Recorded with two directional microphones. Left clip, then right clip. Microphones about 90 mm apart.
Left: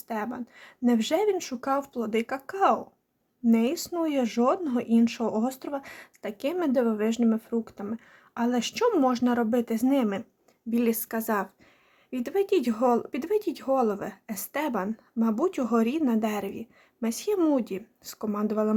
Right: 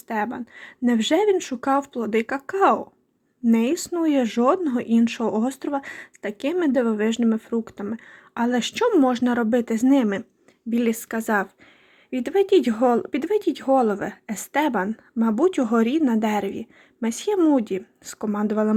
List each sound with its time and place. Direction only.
0.1 s speech: 40° right (ahead or behind)
14.8 s speech: 30° right (ahead or behind)
17.3 s speech: 25° right (ahead or behind)